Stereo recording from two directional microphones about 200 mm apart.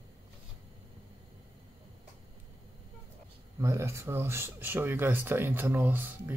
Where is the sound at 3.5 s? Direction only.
15° right (ahead or behind).